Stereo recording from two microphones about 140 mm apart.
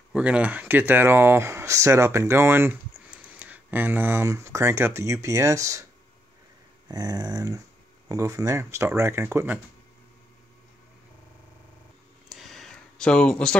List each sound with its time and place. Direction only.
0.1 s speech: 10° right (ahead or behind)
6.9 s speech: 25° right (ahead or behind)
12.3 s a sound: centre (ahead or behind)